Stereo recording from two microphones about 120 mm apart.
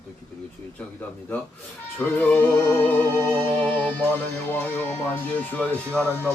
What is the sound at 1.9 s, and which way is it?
Music, 15° left (ahead or behind).